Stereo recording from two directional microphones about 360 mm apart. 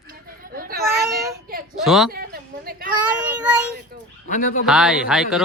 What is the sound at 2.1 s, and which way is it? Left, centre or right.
Speech, right.